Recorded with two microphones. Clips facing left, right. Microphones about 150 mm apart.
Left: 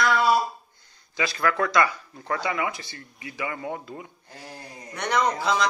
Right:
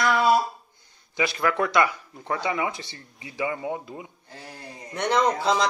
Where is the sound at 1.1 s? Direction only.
20° right (ahead or behind).